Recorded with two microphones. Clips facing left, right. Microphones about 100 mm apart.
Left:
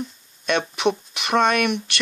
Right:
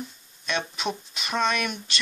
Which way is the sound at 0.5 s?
65° left (ahead or behind).